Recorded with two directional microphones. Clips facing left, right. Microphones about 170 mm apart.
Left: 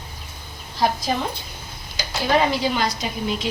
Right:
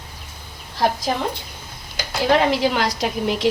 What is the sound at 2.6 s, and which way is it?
Speech, 90° right.